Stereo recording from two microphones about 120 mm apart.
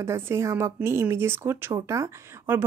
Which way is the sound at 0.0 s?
25° right (ahead or behind).